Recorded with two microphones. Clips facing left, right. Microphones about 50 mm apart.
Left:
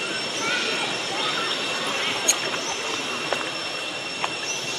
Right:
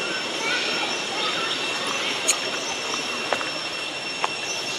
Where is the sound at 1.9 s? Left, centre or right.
Centre.